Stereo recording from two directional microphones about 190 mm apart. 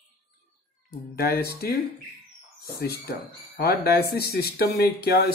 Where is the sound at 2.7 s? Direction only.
55° left (ahead or behind).